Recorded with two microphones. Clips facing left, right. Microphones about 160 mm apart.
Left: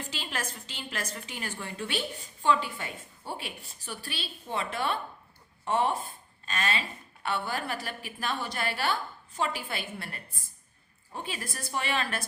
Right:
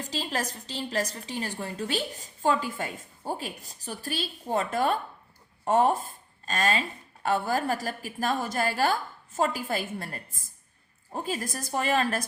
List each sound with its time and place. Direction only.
0.0 s a woman's voice: 40° right (ahead or behind)